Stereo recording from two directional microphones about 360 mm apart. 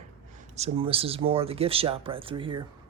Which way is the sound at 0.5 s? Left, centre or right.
Centre.